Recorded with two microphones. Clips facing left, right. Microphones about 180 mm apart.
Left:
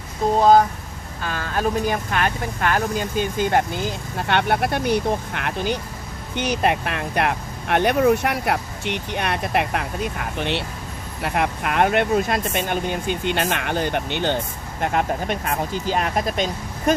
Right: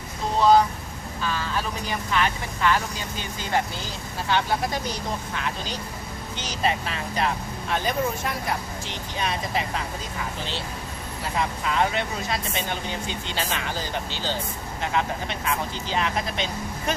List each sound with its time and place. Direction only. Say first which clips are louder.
0.3 s speech: left 3 dB; 45° left (ahead or behind)
14.8 s speech: left 5 dB; 50° left (ahead or behind)